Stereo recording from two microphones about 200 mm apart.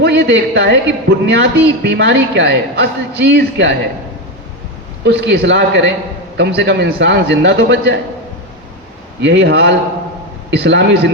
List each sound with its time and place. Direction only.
0.0 s a man's voice: 60° right (ahead or behind)
5.0 s a man's voice: 60° right (ahead or behind)
9.2 s a man's voice: 65° right (ahead or behind)